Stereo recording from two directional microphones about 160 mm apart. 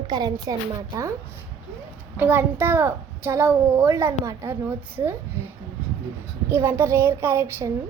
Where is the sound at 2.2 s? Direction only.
15° right (ahead or behind).